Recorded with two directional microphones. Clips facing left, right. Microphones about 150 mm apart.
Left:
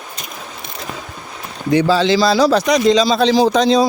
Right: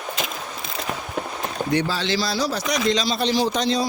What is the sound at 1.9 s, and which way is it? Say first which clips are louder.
A man's voice: left 11 dB; 90° left.